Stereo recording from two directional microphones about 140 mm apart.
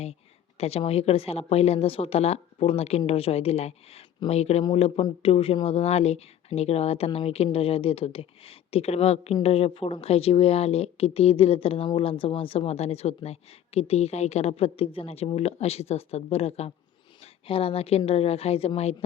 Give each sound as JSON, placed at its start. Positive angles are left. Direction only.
{"t": 0.6, "sound": "a woman's voice", "side_deg": 45}
{"t": 4.6, "sound": "a woman's voice", "side_deg": 40}